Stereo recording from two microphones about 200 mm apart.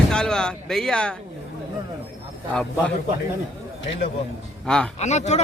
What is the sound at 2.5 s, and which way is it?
Speech, 5° left (ahead or behind).